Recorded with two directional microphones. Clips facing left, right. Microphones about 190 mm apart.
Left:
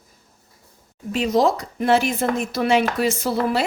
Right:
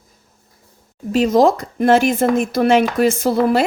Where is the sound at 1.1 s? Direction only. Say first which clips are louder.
Right 5 dB; 45° right (ahead or behind).